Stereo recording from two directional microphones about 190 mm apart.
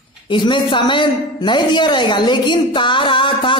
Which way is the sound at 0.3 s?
25° left (ahead or behind).